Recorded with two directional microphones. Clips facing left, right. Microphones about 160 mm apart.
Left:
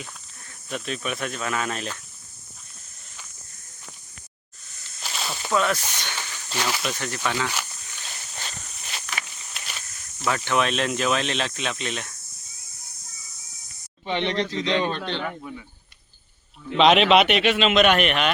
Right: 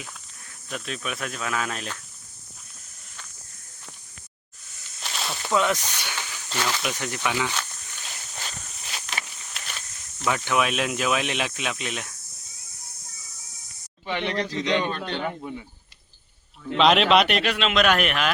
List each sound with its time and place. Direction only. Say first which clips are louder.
0.7 s a man's voice: left 3 dB; centre (ahead or behind)
4.9 s snake: even; centre (ahead or behind)
5.5 s speech: even; 15° right (ahead or behind)
6.4 s speech: even; 10° left (ahead or behind)
6.8 s speech: even; 15° right (ahead or behind)
7.5 s a sound: even; 5° left (ahead or behind)
9.3 s snake: even; centre (ahead or behind)
10.2 s speech: even; 10° right (ahead or behind)
14.1 s a man's voice: left 2 dB; 25° left (ahead or behind)
15.2 s speech: right 2 dB; 25° right (ahead or behind)
16.7 s a man's voice: left 2 dB; centre (ahead or behind)